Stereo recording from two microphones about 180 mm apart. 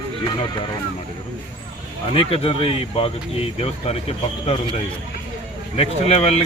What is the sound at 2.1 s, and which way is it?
Speech, 30° left (ahead or behind).